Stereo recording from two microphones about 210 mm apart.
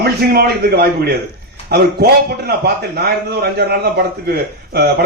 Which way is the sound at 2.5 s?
50° right (ahead or behind).